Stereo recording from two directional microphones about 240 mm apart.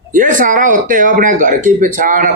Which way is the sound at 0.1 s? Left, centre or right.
Right.